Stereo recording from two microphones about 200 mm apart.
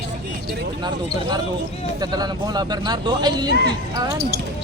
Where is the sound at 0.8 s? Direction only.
20° right (ahead or behind).